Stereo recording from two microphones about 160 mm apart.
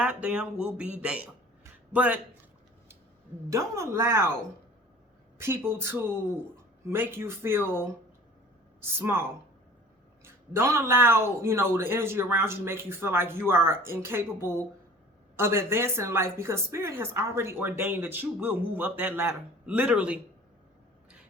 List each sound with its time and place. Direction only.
0.0 s speech: 5° right (ahead or behind)
3.5 s speech: 20° right (ahead or behind)
5.4 s speech: 15° right (ahead or behind)
10.2 s speech: 15° right (ahead or behind)